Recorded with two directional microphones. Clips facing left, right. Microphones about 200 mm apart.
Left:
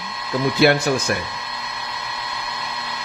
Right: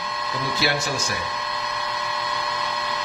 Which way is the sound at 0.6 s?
55° left (ahead or behind).